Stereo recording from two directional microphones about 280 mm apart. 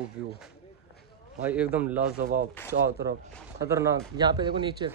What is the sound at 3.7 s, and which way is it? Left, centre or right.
Speech, centre.